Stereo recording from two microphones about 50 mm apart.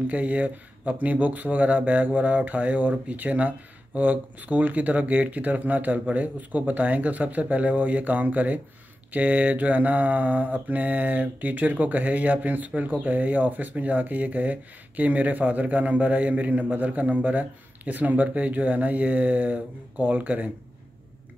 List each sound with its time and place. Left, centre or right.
0.1 s mantra: right